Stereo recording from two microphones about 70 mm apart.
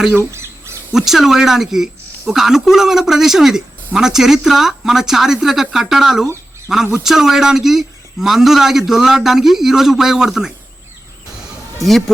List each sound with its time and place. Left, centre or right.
0.2 s squawk: right
0.9 s a man's voice: centre
11.8 s a man's voice: centre